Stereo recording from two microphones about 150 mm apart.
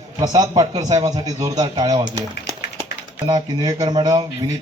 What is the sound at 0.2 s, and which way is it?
Speech, 25° right (ahead or behind).